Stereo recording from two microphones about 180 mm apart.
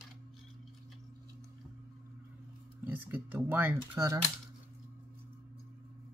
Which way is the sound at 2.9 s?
10° right (ahead or behind).